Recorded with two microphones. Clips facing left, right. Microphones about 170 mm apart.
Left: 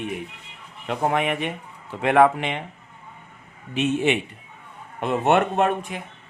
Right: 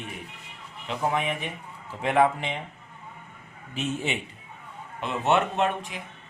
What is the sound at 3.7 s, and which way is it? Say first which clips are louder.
Speech: left 8 dB; 70° left (ahead or behind).